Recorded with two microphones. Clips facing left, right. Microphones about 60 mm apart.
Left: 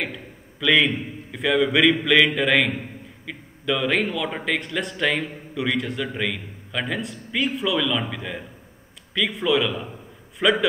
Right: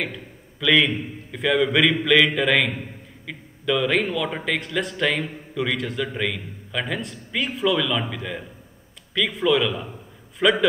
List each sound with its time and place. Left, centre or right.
0.0 s a man's voice: centre